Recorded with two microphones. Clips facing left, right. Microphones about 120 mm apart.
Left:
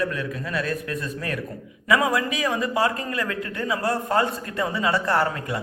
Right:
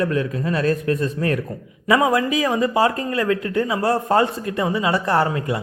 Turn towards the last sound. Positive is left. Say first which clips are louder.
# right 4 dB
turn(degrees=-25)  # may be behind; listen again after turning